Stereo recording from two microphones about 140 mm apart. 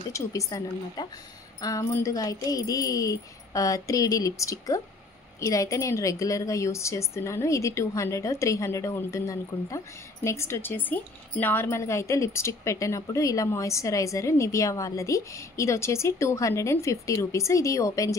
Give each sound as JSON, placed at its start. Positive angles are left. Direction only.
{"t": 0.1, "sound": "a woman's voice", "side_deg": 25}